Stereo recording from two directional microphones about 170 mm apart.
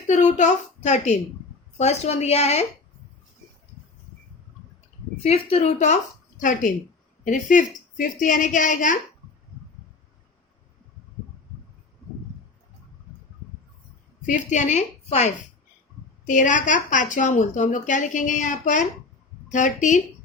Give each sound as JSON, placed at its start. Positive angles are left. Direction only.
{"t": 0.1, "sound": "a woman's voice", "side_deg": 45}
{"t": 5.2, "sound": "speech", "side_deg": 35}
{"t": 14.3, "sound": "speech", "side_deg": 45}